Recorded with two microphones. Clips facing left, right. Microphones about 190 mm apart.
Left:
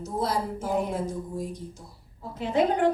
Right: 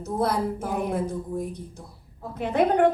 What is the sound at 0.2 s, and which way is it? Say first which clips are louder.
Speech: right 3 dB; 60° right (ahead or behind).